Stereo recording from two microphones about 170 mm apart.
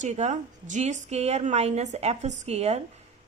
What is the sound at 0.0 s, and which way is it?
A woman's voice, 45° right (ahead or behind).